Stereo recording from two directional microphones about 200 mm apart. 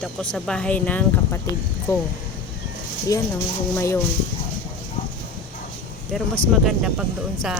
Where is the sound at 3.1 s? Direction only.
15° left (ahead or behind).